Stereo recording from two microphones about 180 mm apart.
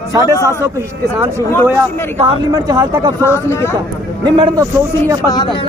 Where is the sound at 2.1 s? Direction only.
20° right (ahead or behind).